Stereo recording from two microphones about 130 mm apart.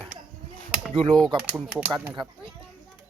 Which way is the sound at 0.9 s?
45° right (ahead or behind).